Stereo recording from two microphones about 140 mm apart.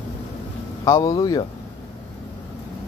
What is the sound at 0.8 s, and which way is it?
Speech, 25° left (ahead or behind).